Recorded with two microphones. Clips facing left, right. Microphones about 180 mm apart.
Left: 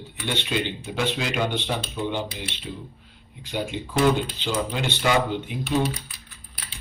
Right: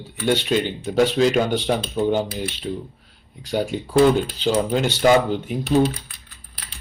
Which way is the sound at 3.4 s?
40° right (ahead or behind).